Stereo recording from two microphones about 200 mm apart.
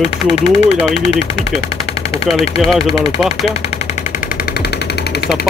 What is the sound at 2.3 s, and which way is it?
Speech, 30° left (ahead or behind).